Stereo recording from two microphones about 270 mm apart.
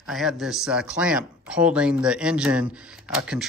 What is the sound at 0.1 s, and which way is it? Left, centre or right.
Speech, centre.